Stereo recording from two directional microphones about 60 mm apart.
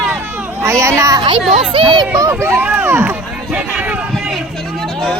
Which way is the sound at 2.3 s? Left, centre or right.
Right.